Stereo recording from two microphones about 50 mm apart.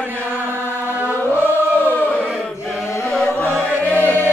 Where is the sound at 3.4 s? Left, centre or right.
Left.